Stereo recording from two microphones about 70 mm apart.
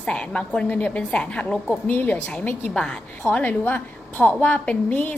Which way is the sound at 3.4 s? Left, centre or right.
Left.